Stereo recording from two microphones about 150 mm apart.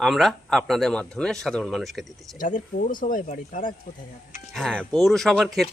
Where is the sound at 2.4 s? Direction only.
65° left (ahead or behind).